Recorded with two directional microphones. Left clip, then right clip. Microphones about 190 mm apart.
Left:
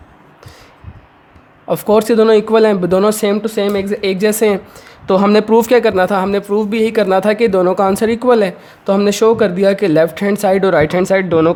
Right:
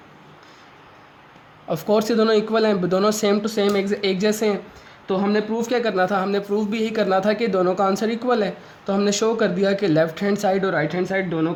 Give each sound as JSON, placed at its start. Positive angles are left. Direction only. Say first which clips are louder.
{"t": 1.6, "sound": "speech", "louder": "left 8 dB", "side_deg": 35}
{"t": 5.0, "sound": "speech", "louder": "left 11 dB", "side_deg": 55}